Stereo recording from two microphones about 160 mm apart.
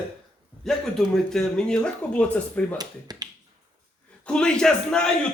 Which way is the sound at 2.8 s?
25° right (ahead or behind).